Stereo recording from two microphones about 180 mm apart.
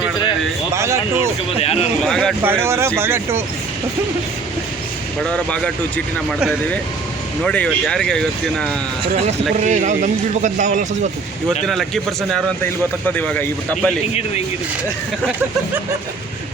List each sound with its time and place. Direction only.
0.7 s speech: 15° right (ahead or behind)
1.5 s speech: 35° left (ahead or behind)
2.0 s speech: 5° left (ahead or behind)
2.4 s speech: 15° right (ahead or behind)
5.2 s speech: 5° left (ahead or behind)
7.4 s speech: 5° left (ahead or behind)
9.1 s speech: 40° right (ahead or behind)
11.6 s speech: centre (ahead or behind)
13.1 s a man's voice: 10° left (ahead or behind)